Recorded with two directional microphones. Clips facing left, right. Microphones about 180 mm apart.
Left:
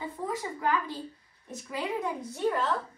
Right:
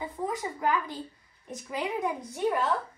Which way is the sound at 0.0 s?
15° right (ahead or behind).